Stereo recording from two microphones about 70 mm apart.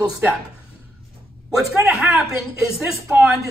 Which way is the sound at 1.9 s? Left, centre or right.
Right.